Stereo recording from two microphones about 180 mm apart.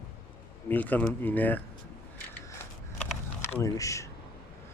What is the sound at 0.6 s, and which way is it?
Speech, 10° left (ahead or behind).